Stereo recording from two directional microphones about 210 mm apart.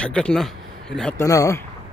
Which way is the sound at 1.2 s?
15° left (ahead or behind).